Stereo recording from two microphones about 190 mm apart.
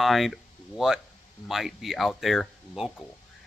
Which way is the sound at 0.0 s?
Centre (ahead or behind).